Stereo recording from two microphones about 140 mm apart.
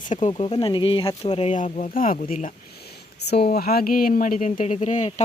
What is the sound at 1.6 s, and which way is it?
Speech, 60° left (ahead or behind).